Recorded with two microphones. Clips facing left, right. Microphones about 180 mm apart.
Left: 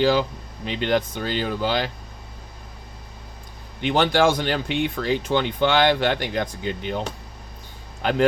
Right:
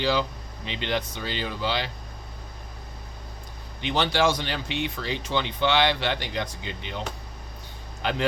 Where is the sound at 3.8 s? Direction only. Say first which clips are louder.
Left 5 dB; 50° left (ahead or behind).